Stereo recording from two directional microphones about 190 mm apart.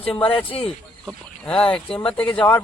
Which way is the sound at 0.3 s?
30° left (ahead or behind).